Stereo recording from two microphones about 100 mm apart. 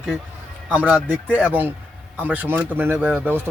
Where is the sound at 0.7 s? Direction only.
15° right (ahead or behind).